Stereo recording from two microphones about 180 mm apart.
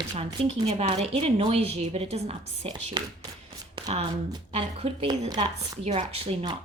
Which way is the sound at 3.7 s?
30° right (ahead or behind).